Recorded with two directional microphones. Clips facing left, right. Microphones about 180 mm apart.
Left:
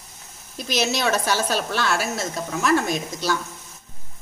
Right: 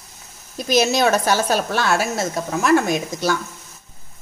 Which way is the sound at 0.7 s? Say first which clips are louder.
Right 6 dB; 45° right (ahead or behind).